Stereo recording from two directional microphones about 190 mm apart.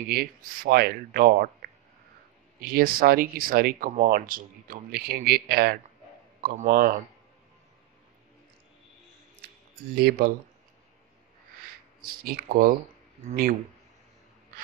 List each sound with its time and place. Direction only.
0.1 s speech: 55° right (ahead or behind)
6.4 s speech: 40° right (ahead or behind)
9.9 s speech: 55° right (ahead or behind)
12.0 s speech: 50° right (ahead or behind)